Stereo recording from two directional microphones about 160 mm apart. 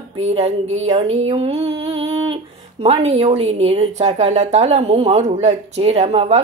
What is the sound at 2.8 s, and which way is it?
A woman's voice, 40° right (ahead or behind).